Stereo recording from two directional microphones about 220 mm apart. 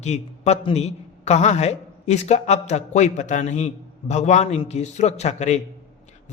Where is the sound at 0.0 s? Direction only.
30° left (ahead or behind).